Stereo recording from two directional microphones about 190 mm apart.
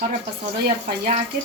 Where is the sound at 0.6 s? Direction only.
55° right (ahead or behind).